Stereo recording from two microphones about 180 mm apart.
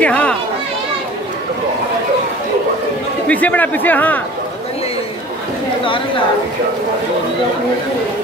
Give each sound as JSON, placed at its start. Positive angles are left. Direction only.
{"t": 0.0, "sound": "a sound", "side_deg": 5}
{"t": 3.3, "sound": "speech", "side_deg": 10}
{"t": 5.9, "sound": "speech", "side_deg": 30}